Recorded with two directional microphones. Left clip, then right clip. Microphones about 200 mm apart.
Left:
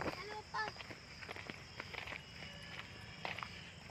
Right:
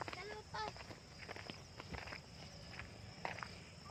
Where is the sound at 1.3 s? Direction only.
15° left (ahead or behind).